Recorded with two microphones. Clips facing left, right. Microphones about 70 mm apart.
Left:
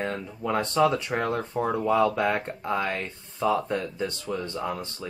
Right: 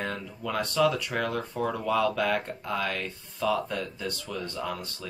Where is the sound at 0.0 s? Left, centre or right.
Left.